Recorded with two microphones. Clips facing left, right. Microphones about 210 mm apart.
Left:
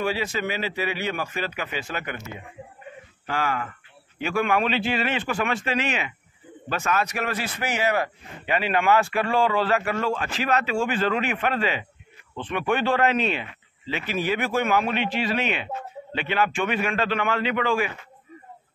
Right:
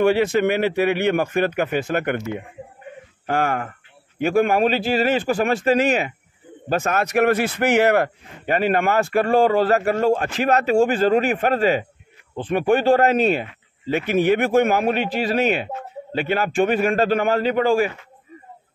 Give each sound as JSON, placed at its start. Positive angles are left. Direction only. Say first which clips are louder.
{"t": 0.0, "sound": "a man's voice", "louder": "right 10 dB", "side_deg": -55}
{"t": 8.5, "sound": "speech", "louder": "right 3 dB", "side_deg": -45}